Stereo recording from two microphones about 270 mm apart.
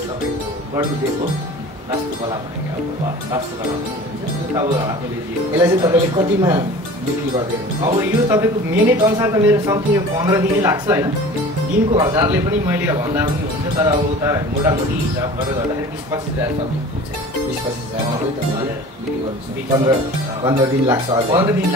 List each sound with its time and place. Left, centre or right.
4.6 s speech: centre
11.9 s speech: centre
12.2 s speech: centre
20.4 s speech: centre